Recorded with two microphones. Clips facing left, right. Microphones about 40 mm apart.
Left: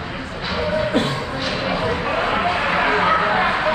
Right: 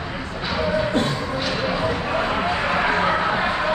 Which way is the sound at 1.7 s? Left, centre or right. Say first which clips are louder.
Left 1 dB; centre.